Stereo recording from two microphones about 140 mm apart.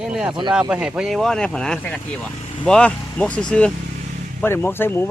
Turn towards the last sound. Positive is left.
turn(degrees=15)  # may be behind; listen again after turning